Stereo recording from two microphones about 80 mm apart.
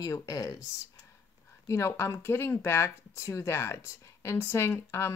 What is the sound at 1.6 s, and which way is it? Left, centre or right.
Speech, left.